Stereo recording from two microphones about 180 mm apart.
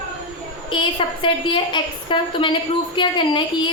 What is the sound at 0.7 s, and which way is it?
A woman's voice, 30° left (ahead or behind).